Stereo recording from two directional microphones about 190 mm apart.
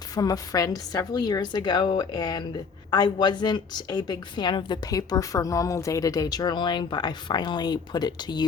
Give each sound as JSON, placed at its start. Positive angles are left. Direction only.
{"t": 0.1, "sound": "a woman's voice", "side_deg": 20}